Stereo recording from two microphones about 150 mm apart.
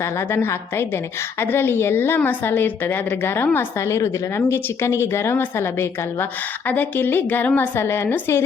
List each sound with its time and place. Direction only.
0.0 s a woman's voice: 15° left (ahead or behind)